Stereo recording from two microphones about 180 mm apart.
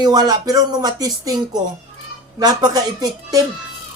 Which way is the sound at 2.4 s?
20° right (ahead or behind).